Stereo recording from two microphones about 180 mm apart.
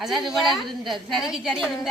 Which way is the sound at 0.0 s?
Centre (ahead or behind).